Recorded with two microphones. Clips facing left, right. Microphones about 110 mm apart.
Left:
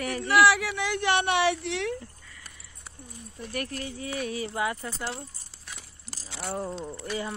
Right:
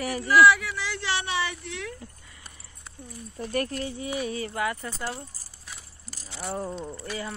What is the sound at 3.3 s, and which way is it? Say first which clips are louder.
Speech: right 5 dB; 35° right (ahead or behind).